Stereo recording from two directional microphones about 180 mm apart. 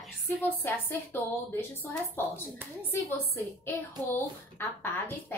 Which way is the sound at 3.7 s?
15° left (ahead or behind).